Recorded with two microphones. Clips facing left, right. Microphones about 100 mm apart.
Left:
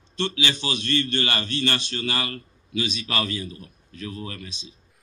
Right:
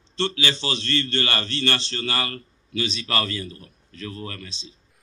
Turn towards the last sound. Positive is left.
turn(degrees=15)  # may be behind; listen again after turning